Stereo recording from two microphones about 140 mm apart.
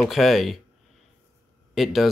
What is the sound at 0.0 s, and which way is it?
Speech, centre (ahead or behind).